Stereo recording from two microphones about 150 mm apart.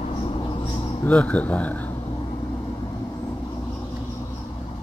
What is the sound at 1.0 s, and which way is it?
Speech, 10° left (ahead or behind).